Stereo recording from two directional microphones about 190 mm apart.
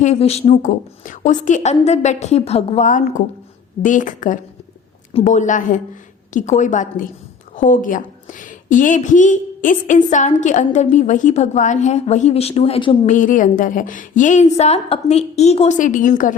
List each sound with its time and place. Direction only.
0.0 s a woman's voice: 35° left (ahead or behind)
13.1 s a woman's voice: 45° left (ahead or behind)